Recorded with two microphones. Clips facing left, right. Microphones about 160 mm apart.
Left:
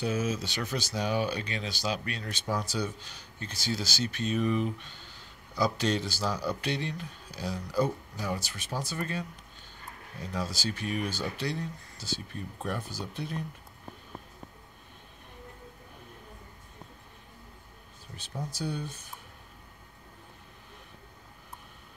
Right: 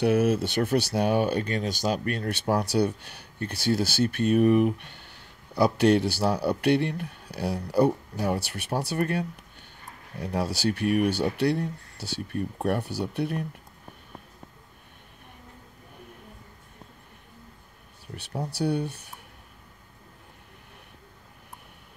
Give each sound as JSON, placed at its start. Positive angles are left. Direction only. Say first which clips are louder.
{"t": 0.0, "sound": "speech", "louder": "right 8 dB", "side_deg": -65}
{"t": 10.2, "sound": "speech", "louder": "right 7 dB", "side_deg": -65}
{"t": 18.1, "sound": "speech", "louder": "right 6 dB", "side_deg": -65}